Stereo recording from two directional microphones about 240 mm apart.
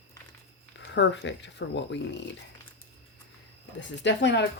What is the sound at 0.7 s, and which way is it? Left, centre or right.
Speech, left.